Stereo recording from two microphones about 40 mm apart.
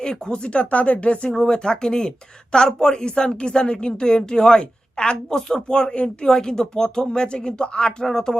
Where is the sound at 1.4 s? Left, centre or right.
Left.